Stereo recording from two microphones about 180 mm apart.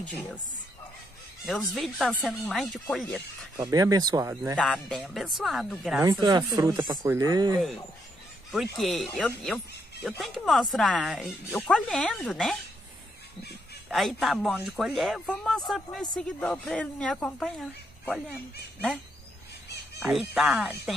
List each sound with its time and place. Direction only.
0.1 s a woman's voice: 10° left (ahead or behind)
1.4 s speech: centre (ahead or behind)
3.5 s speech: 20° right (ahead or behind)
4.6 s speech: 5° left (ahead or behind)
5.9 s speech: 20° right (ahead or behind)
8.7 s speech: centre (ahead or behind)
13.8 s speech: centre (ahead or behind)
20.1 s speech: centre (ahead or behind)